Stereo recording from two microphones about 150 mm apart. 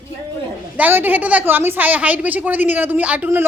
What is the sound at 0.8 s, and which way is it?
A woman's voice, 10° right (ahead or behind).